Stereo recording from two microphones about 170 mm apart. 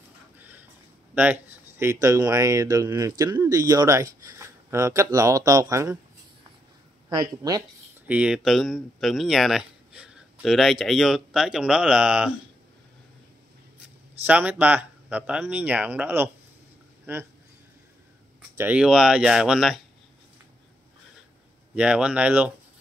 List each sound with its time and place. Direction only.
0.4 s a sound: 10° right (ahead or behind)
1.1 s speech: 10° right (ahead or behind)
7.1 s speech: 20° right (ahead or behind)
8.1 s speech: 5° right (ahead or behind)
14.2 s speech: 10° right (ahead or behind)
18.6 s speech: 5° right (ahead or behind)
21.7 s speech: 5° right (ahead or behind)